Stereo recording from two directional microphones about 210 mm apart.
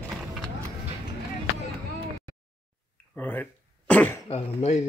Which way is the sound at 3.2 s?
10° left (ahead or behind).